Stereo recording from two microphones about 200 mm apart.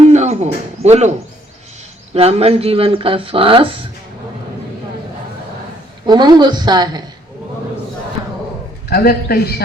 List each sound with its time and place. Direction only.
0.1 s speech: 35° right (ahead or behind)
2.1 s speech: 30° right (ahead or behind)
6.1 s speech: 20° right (ahead or behind)
8.9 s a man's voice: 50° left (ahead or behind)